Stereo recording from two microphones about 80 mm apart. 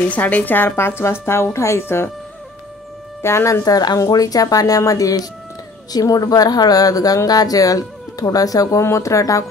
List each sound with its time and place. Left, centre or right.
0.1 s a woman's voice: centre
3.2 s a woman's voice: left
3.6 s a woman's voice: left